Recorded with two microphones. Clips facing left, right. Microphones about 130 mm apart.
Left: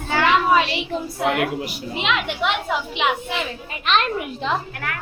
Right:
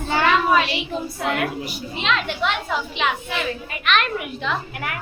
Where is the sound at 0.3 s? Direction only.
20° left (ahead or behind).